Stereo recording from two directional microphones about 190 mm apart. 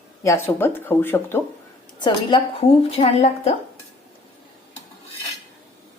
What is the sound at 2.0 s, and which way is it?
A woman's voice, 25° left (ahead or behind).